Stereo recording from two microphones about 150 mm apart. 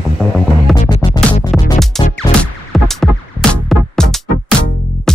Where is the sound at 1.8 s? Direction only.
Centre (ahead or behind).